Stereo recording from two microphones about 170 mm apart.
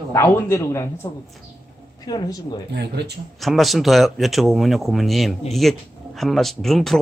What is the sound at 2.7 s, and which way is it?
Speech, 80° right.